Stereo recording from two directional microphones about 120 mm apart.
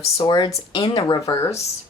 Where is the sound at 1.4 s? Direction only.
25° left (ahead or behind).